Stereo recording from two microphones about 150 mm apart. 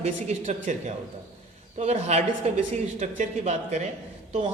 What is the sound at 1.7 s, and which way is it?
A woman's voice, 45° right (ahead or behind).